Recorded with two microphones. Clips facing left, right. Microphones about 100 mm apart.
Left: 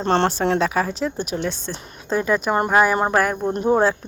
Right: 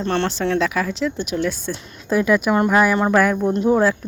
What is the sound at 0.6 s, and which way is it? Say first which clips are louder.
Speech: even; 35° left (ahead or behind).